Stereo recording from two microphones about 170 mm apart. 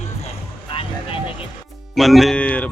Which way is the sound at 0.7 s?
30° left (ahead or behind).